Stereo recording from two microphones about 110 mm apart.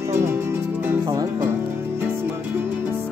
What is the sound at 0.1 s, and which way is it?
Music, 25° right (ahead or behind).